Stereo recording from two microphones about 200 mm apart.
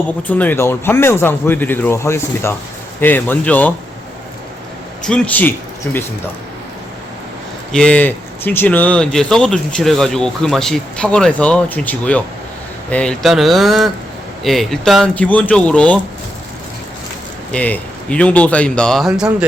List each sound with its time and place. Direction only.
0.3 s speech: 10° left (ahead or behind)
5.0 s speech: 5° left (ahead or behind)
7.7 s speech: 5° left (ahead or behind)
17.5 s speech: 5° left (ahead or behind)